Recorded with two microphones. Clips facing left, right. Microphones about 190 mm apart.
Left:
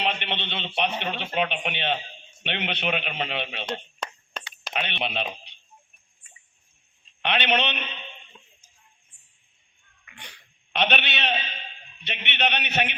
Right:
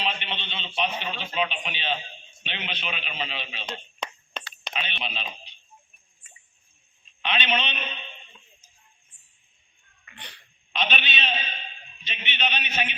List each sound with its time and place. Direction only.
0.0 s a sound: 65° left (ahead or behind)
2.4 s a man's voice: 60° left (ahead or behind)
4.0 s a sound: 5° left (ahead or behind)
4.7 s speech: 65° left (ahead or behind)
7.2 s a man's voice: 65° left (ahead or behind)
10.1 s wheeze: 10° left (ahead or behind)
10.7 s a man's voice: 65° left (ahead or behind)